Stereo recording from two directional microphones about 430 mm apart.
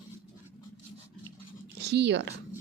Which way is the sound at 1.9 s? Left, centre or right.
Right.